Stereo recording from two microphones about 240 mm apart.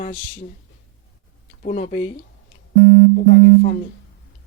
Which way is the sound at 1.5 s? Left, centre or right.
Left.